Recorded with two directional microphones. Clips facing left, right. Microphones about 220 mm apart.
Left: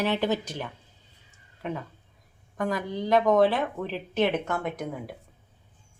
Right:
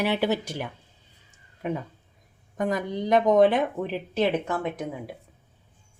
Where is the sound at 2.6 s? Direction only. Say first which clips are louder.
Right 2 dB; 20° right (ahead or behind); by 5.1 s centre (ahead or behind).